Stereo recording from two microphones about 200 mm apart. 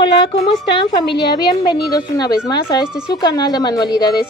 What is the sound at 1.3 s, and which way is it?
Speech, 20° left (ahead or behind).